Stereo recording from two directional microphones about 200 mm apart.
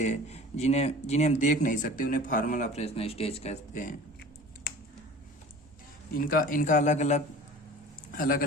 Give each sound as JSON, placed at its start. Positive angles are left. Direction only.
{"t": 0.0, "sound": "speech", "side_deg": 35}
{"t": 6.1, "sound": "speech", "side_deg": 45}